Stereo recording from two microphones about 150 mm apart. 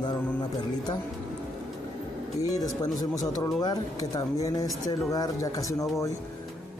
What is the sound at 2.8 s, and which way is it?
Speech, 25° left (ahead or behind).